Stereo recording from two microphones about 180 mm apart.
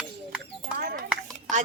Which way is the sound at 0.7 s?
50° right (ahead or behind).